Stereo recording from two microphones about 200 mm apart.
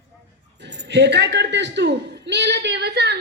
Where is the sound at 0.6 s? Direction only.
60° right (ahead or behind).